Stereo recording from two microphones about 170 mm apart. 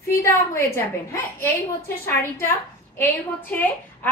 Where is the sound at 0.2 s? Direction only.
15° left (ahead or behind).